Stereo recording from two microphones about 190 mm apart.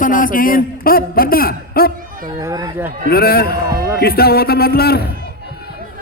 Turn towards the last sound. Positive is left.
turn(degrees=55)  # may be behind; listen again after turning